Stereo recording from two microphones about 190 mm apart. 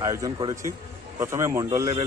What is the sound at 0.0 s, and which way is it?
A man's voice, 20° right (ahead or behind).